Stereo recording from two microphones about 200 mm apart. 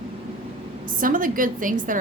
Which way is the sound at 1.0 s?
45° right (ahead or behind).